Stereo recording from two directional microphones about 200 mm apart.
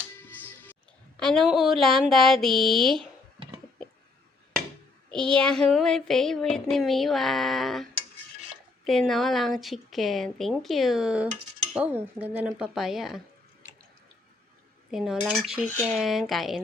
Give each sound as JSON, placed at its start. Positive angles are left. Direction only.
{"t": 1.1, "sound": "speech", "side_deg": 0}
{"t": 2.0, "sound": "child singing", "side_deg": 0}
{"t": 5.1, "sound": "child singing", "side_deg": 5}
{"t": 8.9, "sound": "child singing", "side_deg": 0}
{"t": 14.8, "sound": "child singing", "side_deg": -5}